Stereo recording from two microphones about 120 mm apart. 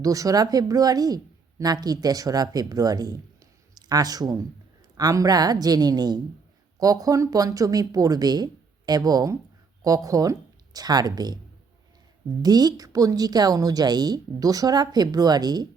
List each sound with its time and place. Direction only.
0.0 s a woman's voice: 30° right (ahead or behind)
12.4 s a woman's voice: 35° right (ahead or behind)